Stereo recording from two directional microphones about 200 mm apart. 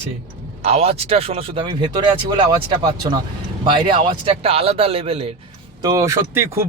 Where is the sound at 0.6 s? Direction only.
30° right (ahead or behind).